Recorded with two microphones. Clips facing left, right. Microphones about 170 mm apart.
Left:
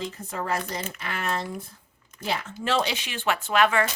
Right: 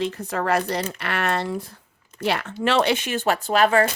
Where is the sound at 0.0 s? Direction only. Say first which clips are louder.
Right 7 dB; 70° right (ahead or behind); by 3.8 s 40° right (ahead or behind).